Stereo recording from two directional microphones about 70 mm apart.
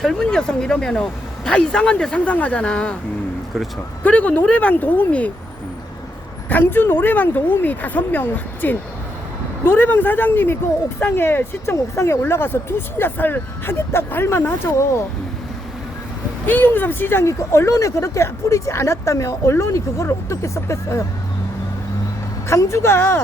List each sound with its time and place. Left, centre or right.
0.0 s speech: centre
4.0 s speech: left
6.5 s speech: left
12.2 s speech: left
16.5 s speech: left
22.4 s speech: left